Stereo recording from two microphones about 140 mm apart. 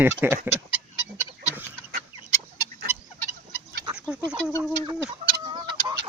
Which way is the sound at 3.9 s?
5° right (ahead or behind).